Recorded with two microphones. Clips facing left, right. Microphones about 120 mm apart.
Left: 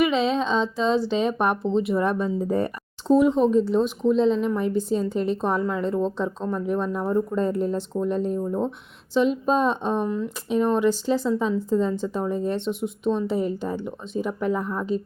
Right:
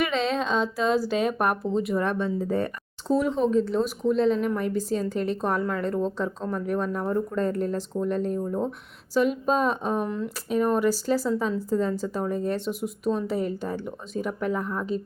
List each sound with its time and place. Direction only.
0.0 s a woman's voice: centre (ahead or behind)
2.4 s speech: 35° left (ahead or behind)
3.2 s a woman's voice: centre (ahead or behind)